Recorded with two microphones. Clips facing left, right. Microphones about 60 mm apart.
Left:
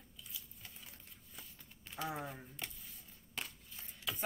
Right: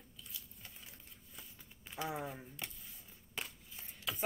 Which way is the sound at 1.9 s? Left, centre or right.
Centre.